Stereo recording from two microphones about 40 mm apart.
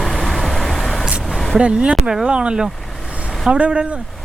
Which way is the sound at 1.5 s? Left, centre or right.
Right.